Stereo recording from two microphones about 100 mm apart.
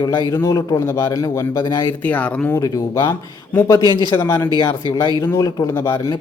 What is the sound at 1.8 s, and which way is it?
Speech, 15° left (ahead or behind).